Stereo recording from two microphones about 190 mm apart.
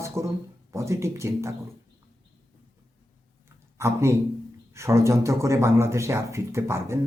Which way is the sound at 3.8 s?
15° right (ahead or behind).